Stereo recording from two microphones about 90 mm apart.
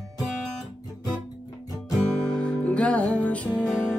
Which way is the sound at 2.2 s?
10° left (ahead or behind).